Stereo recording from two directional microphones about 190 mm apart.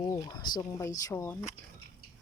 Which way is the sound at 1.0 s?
15° left (ahead or behind).